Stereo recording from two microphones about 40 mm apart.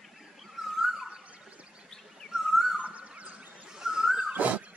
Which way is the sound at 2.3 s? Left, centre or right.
Centre.